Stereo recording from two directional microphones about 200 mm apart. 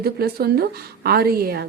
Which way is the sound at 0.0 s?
50° right (ahead or behind).